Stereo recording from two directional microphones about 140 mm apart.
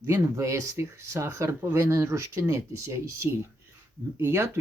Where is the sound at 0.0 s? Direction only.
20° right (ahead or behind).